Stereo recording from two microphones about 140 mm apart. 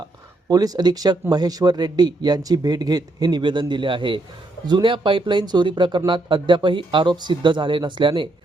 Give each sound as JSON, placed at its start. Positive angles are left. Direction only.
{"t": 0.4, "sound": "speech", "side_deg": -25}